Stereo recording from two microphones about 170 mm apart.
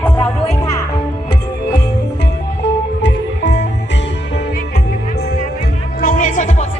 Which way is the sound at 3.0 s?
90° left.